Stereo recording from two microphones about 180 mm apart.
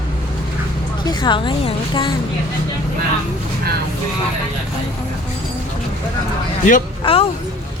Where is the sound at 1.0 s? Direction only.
25° left (ahead or behind).